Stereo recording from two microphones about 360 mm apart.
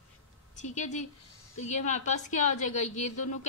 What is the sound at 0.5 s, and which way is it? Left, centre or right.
A woman's voice, centre.